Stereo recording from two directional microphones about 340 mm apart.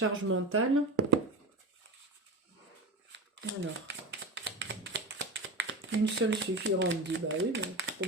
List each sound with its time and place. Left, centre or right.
0.0 s speech: right
3.1 s shuffling cards: right